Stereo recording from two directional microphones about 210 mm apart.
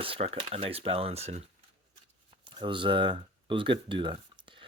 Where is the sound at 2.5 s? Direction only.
25° right (ahead or behind).